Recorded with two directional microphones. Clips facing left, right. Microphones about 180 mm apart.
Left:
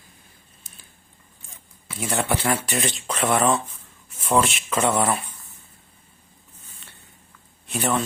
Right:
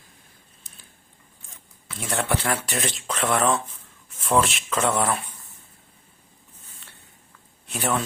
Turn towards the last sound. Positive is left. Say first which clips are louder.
# left 2 dB
turn(degrees=0)  # may be behind; listen again after turning